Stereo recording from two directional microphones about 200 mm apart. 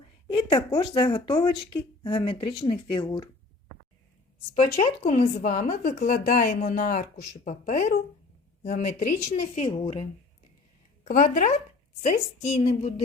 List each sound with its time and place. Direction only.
0.3 s speech: 25° left (ahead or behind)
4.5 s speech: 35° left (ahead or behind)